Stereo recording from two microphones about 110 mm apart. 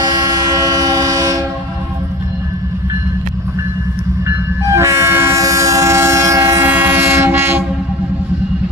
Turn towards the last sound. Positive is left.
turn(degrees=-20)  # may be behind; listen again after turning